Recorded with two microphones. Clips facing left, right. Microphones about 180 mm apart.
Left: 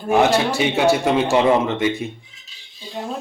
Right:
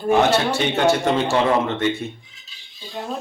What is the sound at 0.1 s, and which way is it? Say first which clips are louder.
A man's voice: left 1 dB; 15° left (ahead or behind).